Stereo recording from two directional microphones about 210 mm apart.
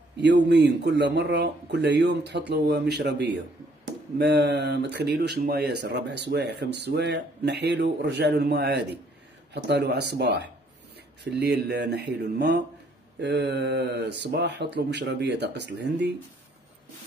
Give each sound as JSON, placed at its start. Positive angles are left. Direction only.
{"t": 0.2, "sound": "speech", "side_deg": -55}